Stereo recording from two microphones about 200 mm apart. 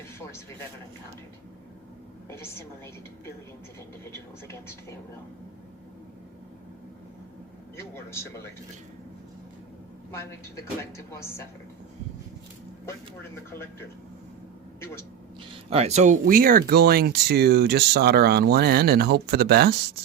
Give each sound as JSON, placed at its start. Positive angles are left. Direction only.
{"t": 2.3, "sound": "a woman's voice", "side_deg": 10}
{"t": 7.8, "sound": "a woman's voice", "side_deg": 15}
{"t": 10.1, "sound": "a woman's voice", "side_deg": 15}
{"t": 15.7, "sound": "speech", "side_deg": -30}